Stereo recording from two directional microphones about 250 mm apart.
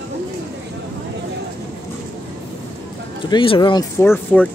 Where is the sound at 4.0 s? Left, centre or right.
Centre.